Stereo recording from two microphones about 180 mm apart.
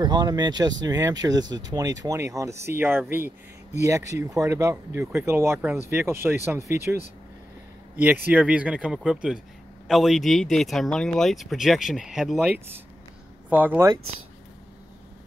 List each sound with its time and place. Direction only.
0.0 s speech: 25° right (ahead or behind)